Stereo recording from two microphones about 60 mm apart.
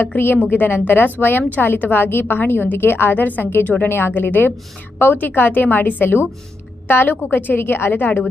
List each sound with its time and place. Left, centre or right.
0.5 s a woman's voice: left